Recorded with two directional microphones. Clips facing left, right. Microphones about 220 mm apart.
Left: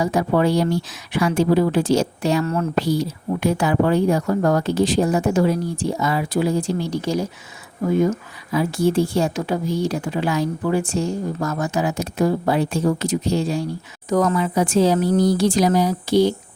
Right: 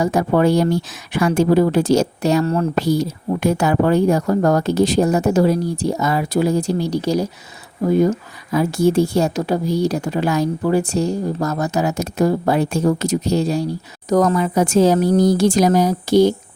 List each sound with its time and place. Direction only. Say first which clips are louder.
0.0 s a woman's voice: right 3 dB; 45° right (ahead or behind)